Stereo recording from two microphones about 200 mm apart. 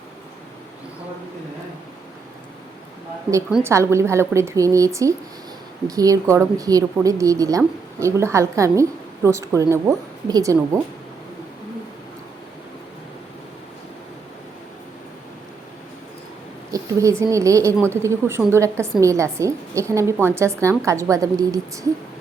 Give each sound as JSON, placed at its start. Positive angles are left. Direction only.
{"t": 3.5, "sound": "a woman's voice", "side_deg": -15}
{"t": 16.7, "sound": "a woman's voice", "side_deg": -15}